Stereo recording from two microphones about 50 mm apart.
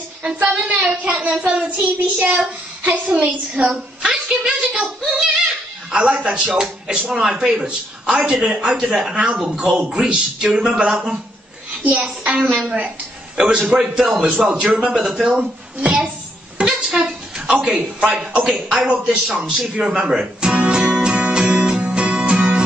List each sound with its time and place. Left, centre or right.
0.2 s a woman's voice: right
13.4 s a woman's voice: centre
16.5 s a sound: centre
18.4 s a woman's voice: centre
19.7 s music: centre